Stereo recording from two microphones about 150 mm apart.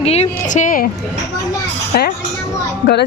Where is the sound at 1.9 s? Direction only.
90° left.